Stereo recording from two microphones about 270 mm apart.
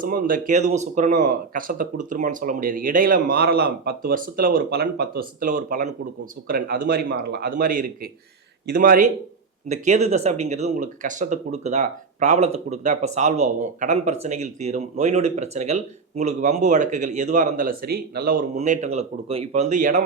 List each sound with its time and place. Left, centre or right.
0.0 s speech: right